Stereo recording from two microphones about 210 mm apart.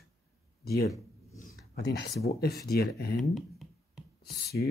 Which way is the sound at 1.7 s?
50° left (ahead or behind).